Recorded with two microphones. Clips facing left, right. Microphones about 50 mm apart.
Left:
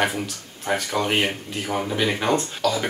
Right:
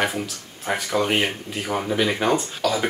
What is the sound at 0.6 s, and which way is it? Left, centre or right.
Speech, centre.